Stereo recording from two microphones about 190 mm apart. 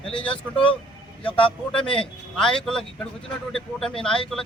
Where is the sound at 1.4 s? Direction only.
25° left (ahead or behind).